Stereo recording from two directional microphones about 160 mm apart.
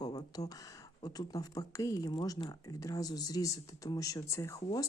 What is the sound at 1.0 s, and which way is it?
Speech, 25° left (ahead or behind).